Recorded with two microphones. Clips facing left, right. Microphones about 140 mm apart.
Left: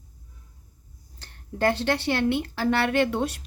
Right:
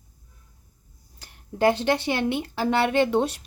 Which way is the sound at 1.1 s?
10° right (ahead or behind).